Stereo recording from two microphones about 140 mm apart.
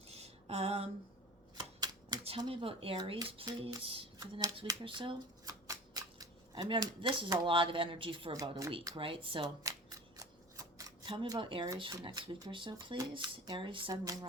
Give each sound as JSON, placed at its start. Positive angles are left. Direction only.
{"t": 0.1, "sound": "a sound", "side_deg": -50}
{"t": 1.5, "sound": "typewriter", "side_deg": -30}
{"t": 2.4, "sound": "speech", "side_deg": -40}
{"t": 3.4, "sound": "a sound", "side_deg": -40}
{"t": 3.8, "sound": "speech", "side_deg": -40}
{"t": 4.2, "sound": "speech", "side_deg": -25}
{"t": 4.8, "sound": "speech", "side_deg": -35}
{"t": 5.6, "sound": "scissors", "side_deg": -25}
{"t": 7.3, "sound": "speech", "side_deg": -40}
{"t": 8.3, "sound": "speech", "side_deg": -25}
{"t": 9.0, "sound": "speech", "side_deg": -40}
{"t": 9.6, "sound": "scissors", "side_deg": -25}
{"t": 11.0, "sound": "speech", "side_deg": -30}
{"t": 13.9, "sound": "speech", "side_deg": -25}